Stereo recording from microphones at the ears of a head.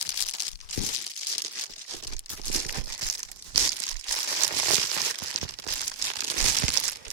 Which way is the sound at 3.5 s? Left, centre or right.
Right.